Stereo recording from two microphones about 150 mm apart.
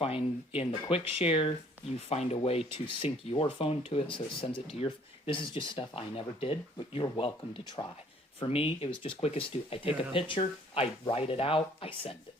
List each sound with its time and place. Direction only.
0.0 s speech: 40° left (ahead or behind)